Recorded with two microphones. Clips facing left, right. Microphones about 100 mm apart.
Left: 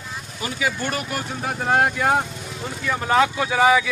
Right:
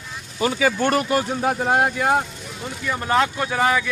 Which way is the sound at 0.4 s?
80° right.